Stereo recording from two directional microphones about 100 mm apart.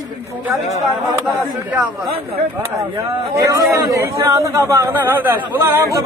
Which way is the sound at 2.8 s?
30° right (ahead or behind).